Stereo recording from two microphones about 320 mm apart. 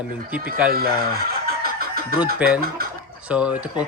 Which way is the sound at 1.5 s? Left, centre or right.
Right.